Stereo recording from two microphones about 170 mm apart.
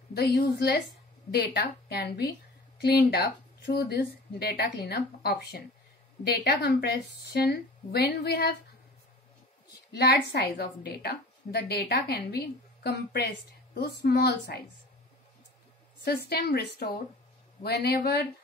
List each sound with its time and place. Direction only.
0.1 s a woman's voice: 75° left (ahead or behind)
9.9 s a woman's voice: 75° left (ahead or behind)
16.0 s a woman's voice: 70° left (ahead or behind)